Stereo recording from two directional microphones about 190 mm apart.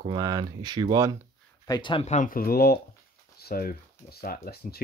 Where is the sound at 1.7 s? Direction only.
25° left (ahead or behind).